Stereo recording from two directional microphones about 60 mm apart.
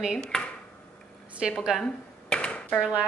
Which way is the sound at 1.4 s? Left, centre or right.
Centre.